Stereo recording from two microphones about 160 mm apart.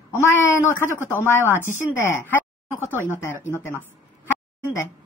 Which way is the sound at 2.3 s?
15° left (ahead or behind).